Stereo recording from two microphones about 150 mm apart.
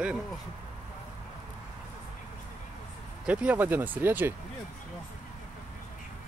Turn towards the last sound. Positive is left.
turn(degrees=-15)  # may be behind; listen again after turning